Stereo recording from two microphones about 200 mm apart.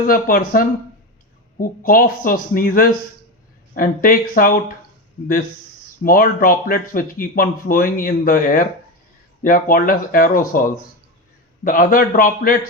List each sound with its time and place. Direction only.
0.1 s speech: 45° left (ahead or behind)
6.0 s speech: 45° left (ahead or behind)